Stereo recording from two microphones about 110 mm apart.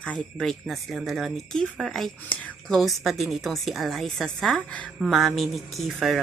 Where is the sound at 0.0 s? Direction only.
5° left (ahead or behind).